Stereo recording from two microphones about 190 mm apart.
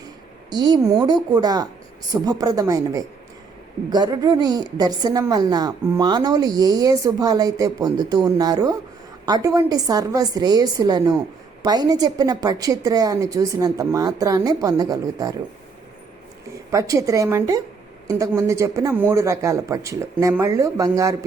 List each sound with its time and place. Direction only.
0.5 s a woman's voice: 20° right (ahead or behind)
16.7 s speech: 15° right (ahead or behind)